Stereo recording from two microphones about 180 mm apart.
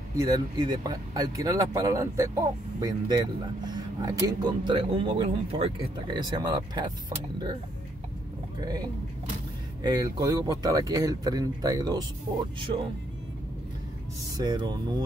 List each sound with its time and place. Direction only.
0.2 s speech: 20° right (ahead or behind)
8.5 s speech: 20° right (ahead or behind)
9.8 s speech: 20° right (ahead or behind)
12.7 s speech: 35° right (ahead or behind)
14.3 s speech: 25° right (ahead or behind)